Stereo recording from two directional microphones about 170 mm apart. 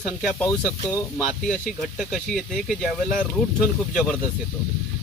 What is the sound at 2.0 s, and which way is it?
Speech, centre (ahead or behind).